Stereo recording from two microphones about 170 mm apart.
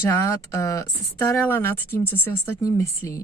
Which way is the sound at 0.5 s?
20° left (ahead or behind).